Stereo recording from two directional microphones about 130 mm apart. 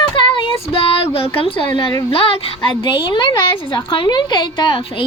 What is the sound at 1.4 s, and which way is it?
A woman's voice, 40° left (ahead or behind).